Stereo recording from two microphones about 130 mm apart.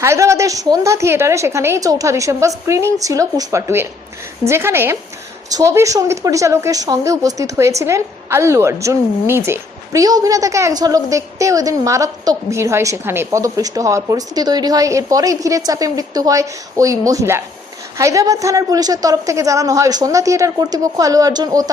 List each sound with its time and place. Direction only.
0.0 s a woman's voice: 20° right (ahead or behind)